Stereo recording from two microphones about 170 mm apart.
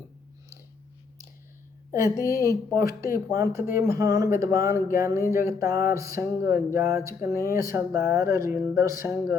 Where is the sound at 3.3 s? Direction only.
15° right (ahead or behind).